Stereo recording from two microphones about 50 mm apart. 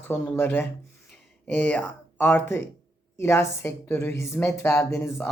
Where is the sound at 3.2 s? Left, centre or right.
Left.